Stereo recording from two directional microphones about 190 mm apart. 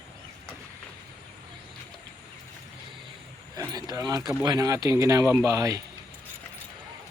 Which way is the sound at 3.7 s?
20° right (ahead or behind).